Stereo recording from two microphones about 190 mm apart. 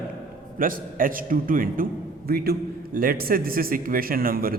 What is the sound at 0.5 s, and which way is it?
A man's voice, 45° right (ahead or behind).